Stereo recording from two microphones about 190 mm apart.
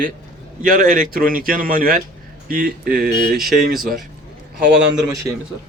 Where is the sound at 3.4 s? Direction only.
Centre (ahead or behind).